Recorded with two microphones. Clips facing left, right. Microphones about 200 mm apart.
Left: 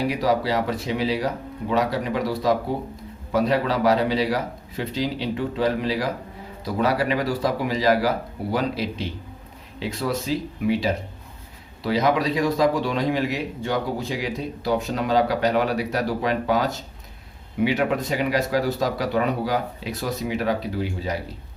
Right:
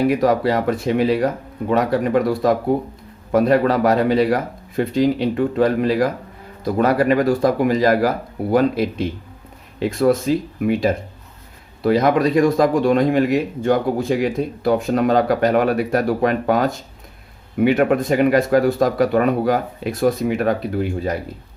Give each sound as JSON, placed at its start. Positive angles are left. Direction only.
{"t": 0.0, "sound": "a man's voice", "side_deg": -50}